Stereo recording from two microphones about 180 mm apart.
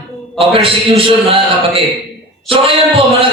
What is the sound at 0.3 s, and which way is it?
A man's voice, 30° right (ahead or behind).